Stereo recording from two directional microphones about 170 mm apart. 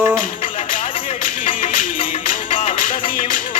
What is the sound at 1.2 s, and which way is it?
Music, 50° left (ahead or behind).